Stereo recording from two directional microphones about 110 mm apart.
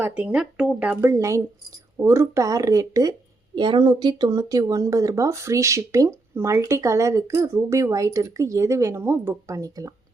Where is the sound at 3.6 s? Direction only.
45° right (ahead or behind); by 10.0 s 30° right (ahead or behind).